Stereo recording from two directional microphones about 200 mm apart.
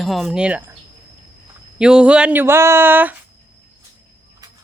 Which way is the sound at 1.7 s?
5° right (ahead or behind).